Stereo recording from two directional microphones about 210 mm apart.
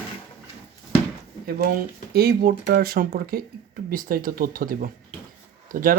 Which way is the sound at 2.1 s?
45° right (ahead or behind).